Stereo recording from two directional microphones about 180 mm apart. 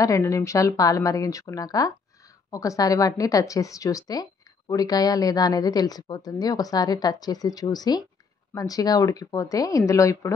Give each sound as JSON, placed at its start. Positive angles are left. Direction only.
{"t": 0.0, "sound": "a woman's voice", "side_deg": 15}